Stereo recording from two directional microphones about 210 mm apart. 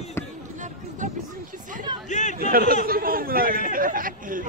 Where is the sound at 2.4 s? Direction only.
45° right (ahead or behind).